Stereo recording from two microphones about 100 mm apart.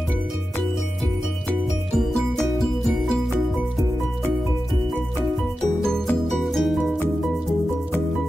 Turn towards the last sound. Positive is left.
turn(degrees=0)  # may be behind; listen again after turning